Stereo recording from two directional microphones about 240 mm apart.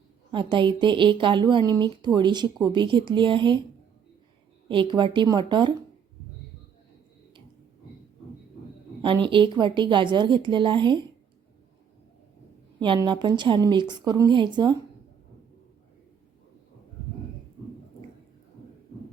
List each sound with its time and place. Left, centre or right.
0.3 s a woman's voice: centre
4.7 s a woman's voice: right
9.2 s a woman's voice: centre
12.8 s a woman's voice: centre